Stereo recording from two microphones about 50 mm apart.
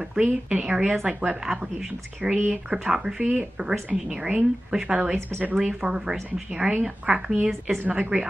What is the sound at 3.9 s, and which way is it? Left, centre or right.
Speech, centre.